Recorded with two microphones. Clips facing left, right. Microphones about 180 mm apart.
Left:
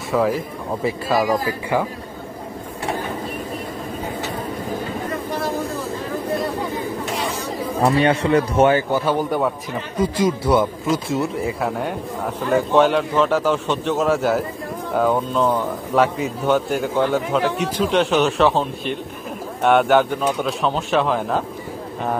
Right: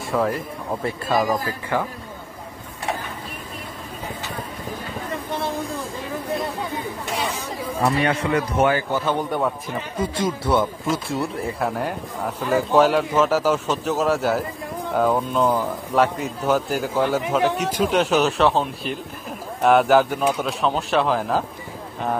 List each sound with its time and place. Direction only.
0.1 s a man's voice: centre (ahead or behind)
7.8 s speech: 30° left (ahead or behind)
8.9 s speech: 5° left (ahead or behind)
11.1 s speech: centre (ahead or behind)